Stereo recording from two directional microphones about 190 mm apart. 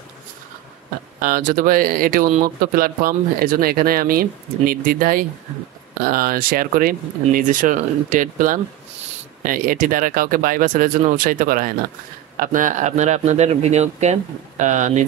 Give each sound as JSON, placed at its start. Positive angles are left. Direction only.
{"t": 1.2, "sound": "speech", "side_deg": -50}